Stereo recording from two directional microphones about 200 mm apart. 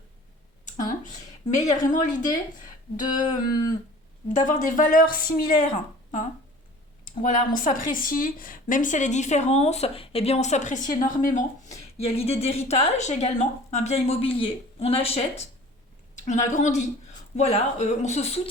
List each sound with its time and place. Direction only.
0.8 s a woman's voice: 40° left (ahead or behind)
3.2 s a sound: 20° left (ahead or behind)
4.3 s a woman's voice: 40° left (ahead or behind)
7.0 s speech: 40° left (ahead or behind)
11.9 s speech: 30° left (ahead or behind)